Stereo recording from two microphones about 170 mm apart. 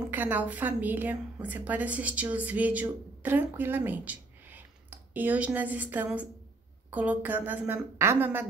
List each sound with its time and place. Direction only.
0.1 s a woman's voice: 10° right (ahead or behind)